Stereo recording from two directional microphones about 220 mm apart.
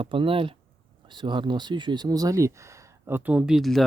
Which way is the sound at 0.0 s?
25° right (ahead or behind).